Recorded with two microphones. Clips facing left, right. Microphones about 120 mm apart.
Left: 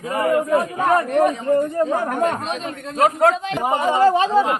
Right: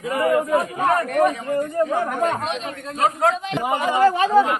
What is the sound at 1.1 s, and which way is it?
Speech, 30° left (ahead or behind).